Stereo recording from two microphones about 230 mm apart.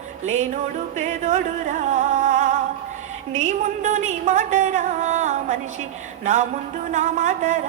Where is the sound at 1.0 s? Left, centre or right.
Right.